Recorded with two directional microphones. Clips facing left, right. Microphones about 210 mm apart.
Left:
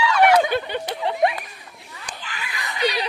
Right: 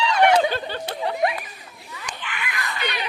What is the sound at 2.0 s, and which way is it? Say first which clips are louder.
Laughter: right 2 dB; 35° left (ahead or behind).